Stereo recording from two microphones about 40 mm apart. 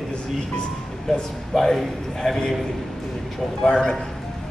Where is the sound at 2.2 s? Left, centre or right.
Centre.